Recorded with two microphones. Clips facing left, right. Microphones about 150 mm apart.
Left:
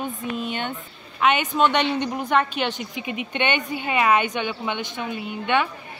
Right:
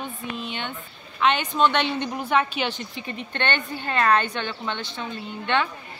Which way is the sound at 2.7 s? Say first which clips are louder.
Left 4 dB; 10° left (ahead or behind).